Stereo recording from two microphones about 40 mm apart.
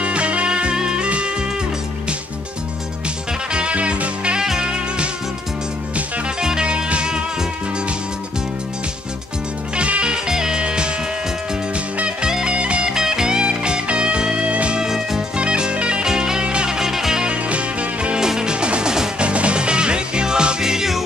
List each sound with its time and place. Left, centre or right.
0.0 s music: right
3.5 s music: right
4.4 s music: centre
6.4 s music: right
9.8 s music: right
10.1 s music: centre
12.9 s music: centre
14.8 s music: centre
15.3 s music: right
17.2 s music: right
18.2 s music: centre